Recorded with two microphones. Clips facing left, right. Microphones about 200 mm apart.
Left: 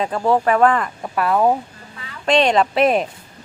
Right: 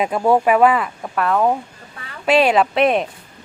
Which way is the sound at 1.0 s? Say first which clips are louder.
Left 1 dB; 5° left (ahead or behind).